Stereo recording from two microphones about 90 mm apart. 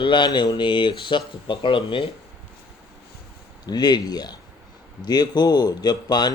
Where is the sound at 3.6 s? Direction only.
50° left (ahead or behind).